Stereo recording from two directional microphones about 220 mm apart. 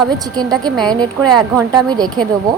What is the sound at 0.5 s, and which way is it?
Speech, 5° left (ahead or behind).